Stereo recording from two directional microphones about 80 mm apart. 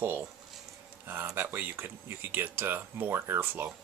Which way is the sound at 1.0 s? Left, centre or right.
Right.